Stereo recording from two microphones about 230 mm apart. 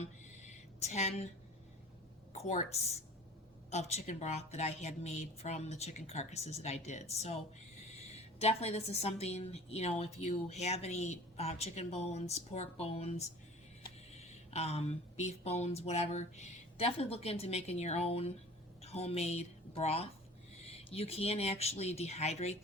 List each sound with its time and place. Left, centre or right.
0.8 s a woman's voice: left
2.3 s a woman's voice: left
14.5 s a woman's voice: left